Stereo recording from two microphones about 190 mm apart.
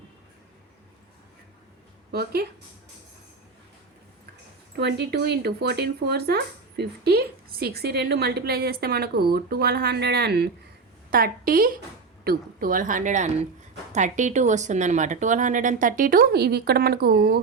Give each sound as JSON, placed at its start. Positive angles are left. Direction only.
{"t": 2.1, "sound": "speech", "side_deg": -55}
{"t": 4.8, "sound": "speech", "side_deg": -60}